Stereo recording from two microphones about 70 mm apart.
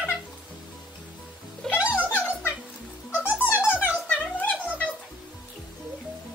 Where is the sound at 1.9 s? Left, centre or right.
Left.